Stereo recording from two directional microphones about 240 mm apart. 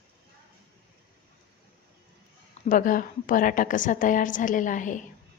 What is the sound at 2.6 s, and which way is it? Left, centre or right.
A woman's voice, left.